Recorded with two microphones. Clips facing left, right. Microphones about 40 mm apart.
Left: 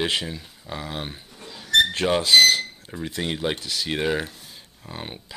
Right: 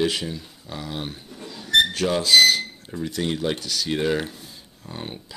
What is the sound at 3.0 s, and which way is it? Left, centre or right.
Speech, left.